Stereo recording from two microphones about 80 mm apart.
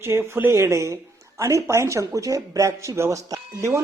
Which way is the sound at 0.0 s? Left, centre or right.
Right.